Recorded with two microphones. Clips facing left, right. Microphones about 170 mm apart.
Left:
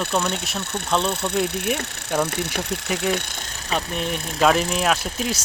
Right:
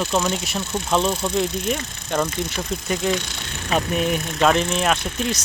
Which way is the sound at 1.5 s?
65° left (ahead or behind).